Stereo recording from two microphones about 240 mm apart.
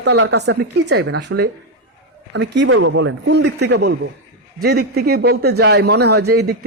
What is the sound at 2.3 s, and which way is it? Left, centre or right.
Speech, right.